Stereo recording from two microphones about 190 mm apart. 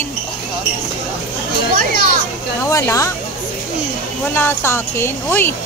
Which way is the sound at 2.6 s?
15° left (ahead or behind).